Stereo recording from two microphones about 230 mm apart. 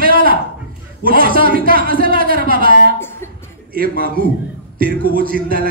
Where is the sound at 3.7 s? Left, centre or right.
Right.